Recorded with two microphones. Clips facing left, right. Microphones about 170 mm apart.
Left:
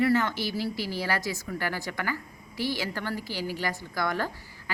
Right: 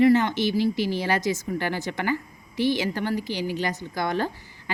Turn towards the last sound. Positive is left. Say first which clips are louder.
# right 4 dB
turn(degrees=-20)  # may be behind; listen again after turning